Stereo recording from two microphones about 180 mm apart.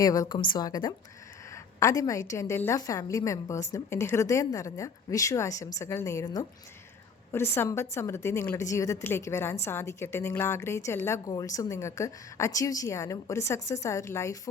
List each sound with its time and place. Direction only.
0.0 s a woman's voice: 20° left (ahead or behind)